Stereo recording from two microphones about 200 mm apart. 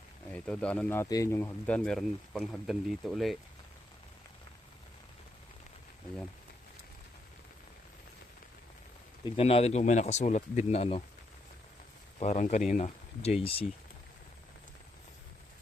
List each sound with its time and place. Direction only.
0.3 s speech: 5° left (ahead or behind)
9.2 s speech: 30° left (ahead or behind)
12.2 s speech: 35° left (ahead or behind)